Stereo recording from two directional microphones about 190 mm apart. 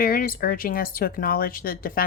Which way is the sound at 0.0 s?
50° left (ahead or behind).